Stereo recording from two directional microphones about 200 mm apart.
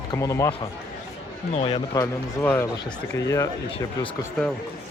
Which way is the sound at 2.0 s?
10° left (ahead or behind).